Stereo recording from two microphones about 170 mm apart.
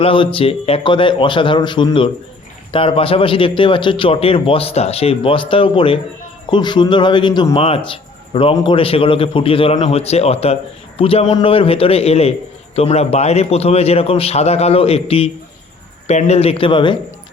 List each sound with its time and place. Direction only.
0.0 s a man's voice: 30° left (ahead or behind)